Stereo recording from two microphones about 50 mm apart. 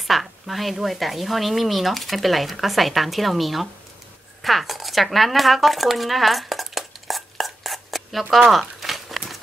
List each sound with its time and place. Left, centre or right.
0.0 s speech: centre
4.4 s a sound: centre
8.5 s crumpling: centre